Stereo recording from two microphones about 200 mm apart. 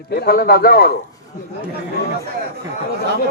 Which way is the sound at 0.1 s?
50° left (ahead or behind).